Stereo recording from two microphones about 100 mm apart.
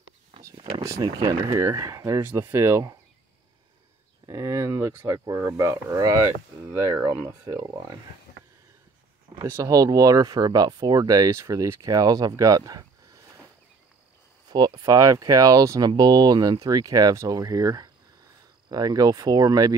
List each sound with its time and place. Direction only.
0.6 s a sound: 65° right (ahead or behind)
1.0 s speech: 50° right (ahead or behind)
1.6 s speech: 30° right (ahead or behind)
4.3 s speech: 35° right (ahead or behind)
9.4 s speech: 30° right (ahead or behind)
14.5 s speech: 45° right (ahead or behind)